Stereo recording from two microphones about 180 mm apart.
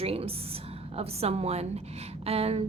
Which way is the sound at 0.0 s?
35° right (ahead or behind).